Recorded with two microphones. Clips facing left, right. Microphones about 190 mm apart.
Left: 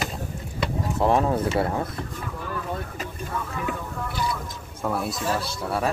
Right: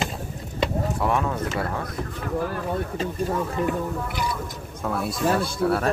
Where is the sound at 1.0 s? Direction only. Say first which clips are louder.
Left 6 dB; 30° left (ahead or behind).